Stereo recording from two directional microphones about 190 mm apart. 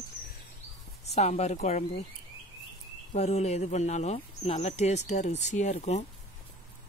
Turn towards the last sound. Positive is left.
turn(degrees=35)  # may be behind; listen again after turning